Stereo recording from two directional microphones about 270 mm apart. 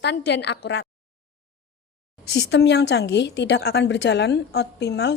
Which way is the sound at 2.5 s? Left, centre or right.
Left.